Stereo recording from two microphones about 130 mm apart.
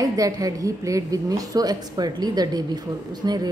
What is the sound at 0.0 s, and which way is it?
A woman's voice, 25° right (ahead or behind).